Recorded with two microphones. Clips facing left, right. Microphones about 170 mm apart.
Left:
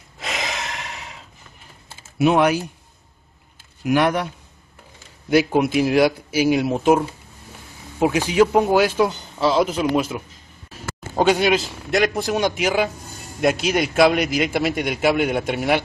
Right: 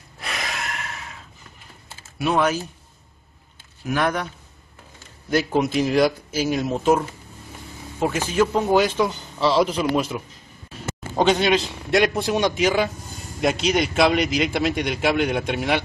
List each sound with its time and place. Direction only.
0.2 s gasp: 20° left (ahead or behind)
2.1 s speech: 20° left (ahead or behind)
3.8 s a man's voice: 10° left (ahead or behind)
5.3 s a man's voice: 10° left (ahead or behind)